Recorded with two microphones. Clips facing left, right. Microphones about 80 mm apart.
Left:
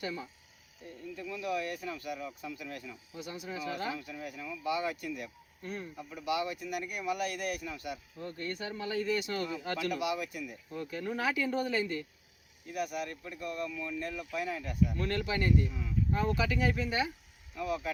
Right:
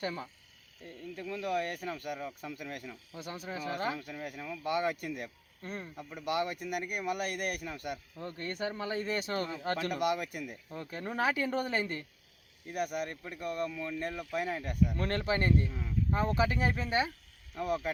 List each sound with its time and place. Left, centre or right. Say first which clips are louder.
0.0 s speech: right 1 dB; right
3.2 s speech: even; right
8.2 s speech: right 2 dB; right
10.7 s speech: left 5 dB; right